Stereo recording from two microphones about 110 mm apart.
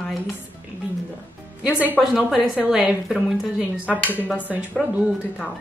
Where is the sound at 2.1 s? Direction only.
Centre (ahead or behind).